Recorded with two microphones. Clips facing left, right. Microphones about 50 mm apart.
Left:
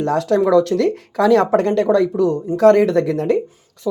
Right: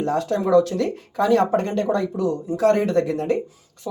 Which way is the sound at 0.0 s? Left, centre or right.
Left.